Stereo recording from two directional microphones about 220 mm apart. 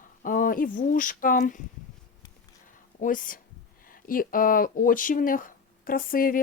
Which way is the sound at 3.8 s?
40° left (ahead or behind).